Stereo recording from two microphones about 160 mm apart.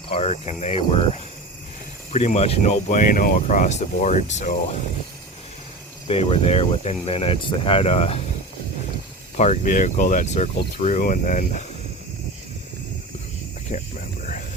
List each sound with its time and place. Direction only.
0.1 s speech: 40° left (ahead or behind)
2.1 s speech: 45° left (ahead or behind)
6.1 s speech: 40° left (ahead or behind)
9.4 s speech: 50° left (ahead or behind)
14.2 s a sound: 50° left (ahead or behind)